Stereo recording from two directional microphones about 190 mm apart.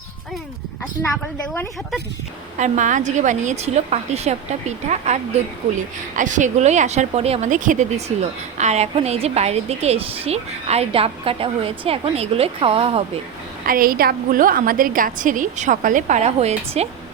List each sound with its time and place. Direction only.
2.6 s a woman's voice: 40° right (ahead or behind)
13.7 s a woman's voice: 50° right (ahead or behind)